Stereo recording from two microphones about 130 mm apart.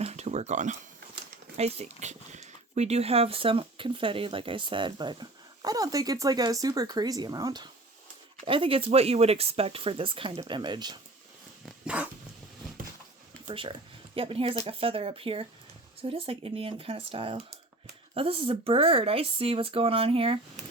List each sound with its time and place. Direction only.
0.0 s a sound: 55° right (ahead or behind)
1.5 s speech: 55° right (ahead or behind); by 7.7 s 30° right (ahead or behind)
8.4 s speech: 45° right (ahead or behind)
11.9 s dog: 10° right (ahead or behind)
13.5 s speech: 40° right (ahead or behind)